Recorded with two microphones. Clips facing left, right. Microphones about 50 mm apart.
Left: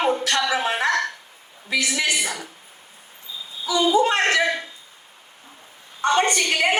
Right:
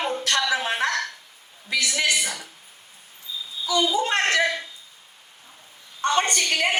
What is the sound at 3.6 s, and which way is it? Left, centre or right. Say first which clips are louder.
Speech: left 4 dB; left.